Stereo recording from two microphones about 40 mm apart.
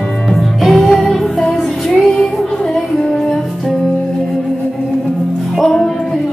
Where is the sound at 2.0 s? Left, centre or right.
Centre.